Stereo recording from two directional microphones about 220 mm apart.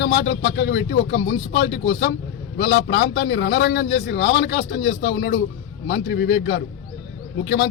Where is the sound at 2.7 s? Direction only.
55° left (ahead or behind).